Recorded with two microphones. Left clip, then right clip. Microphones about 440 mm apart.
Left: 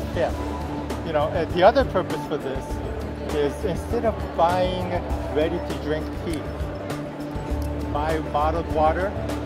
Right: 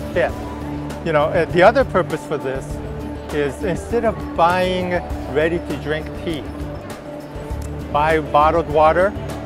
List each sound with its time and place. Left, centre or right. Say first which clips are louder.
0.2 s speech: right 5 dB; right
3.3 s speech: right 4 dB; right
4.4 s speech: right 5 dB; right
7.9 s speech: right 9 dB; right